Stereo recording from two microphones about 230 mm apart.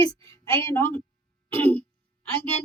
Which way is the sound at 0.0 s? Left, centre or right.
Right.